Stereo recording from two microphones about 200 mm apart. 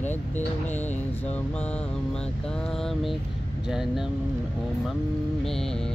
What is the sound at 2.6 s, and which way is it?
Vehicle, centre (ahead or behind).